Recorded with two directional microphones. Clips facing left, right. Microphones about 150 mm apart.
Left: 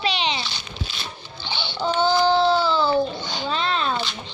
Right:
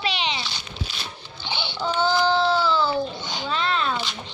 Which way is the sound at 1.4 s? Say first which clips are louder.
Even; 10° right (ahead or behind).